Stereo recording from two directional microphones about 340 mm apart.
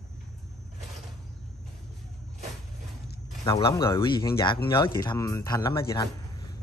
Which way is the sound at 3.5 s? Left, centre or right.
Centre.